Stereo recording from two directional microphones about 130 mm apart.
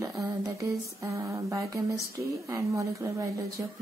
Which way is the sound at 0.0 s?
25° right (ahead or behind).